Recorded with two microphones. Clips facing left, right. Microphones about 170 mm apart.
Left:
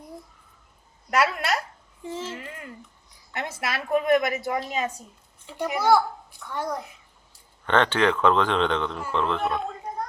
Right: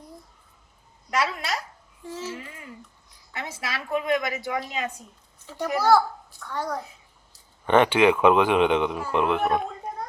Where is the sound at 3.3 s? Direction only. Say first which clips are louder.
Left 3 dB; 55° left (ahead or behind).